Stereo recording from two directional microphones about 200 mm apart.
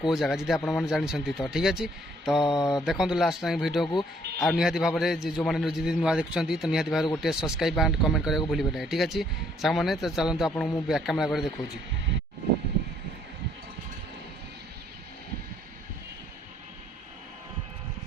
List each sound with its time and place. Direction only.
0.0 s a man's voice: centre (ahead or behind)
2.4 s speech: 20° left (ahead or behind)
2.6 s a man's voice: centre (ahead or behind)